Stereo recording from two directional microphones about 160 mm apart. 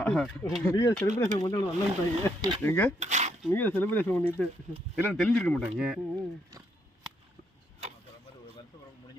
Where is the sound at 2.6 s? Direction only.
10° left (ahead or behind).